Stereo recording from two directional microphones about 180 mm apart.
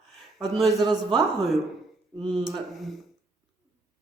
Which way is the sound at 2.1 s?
20° right (ahead or behind).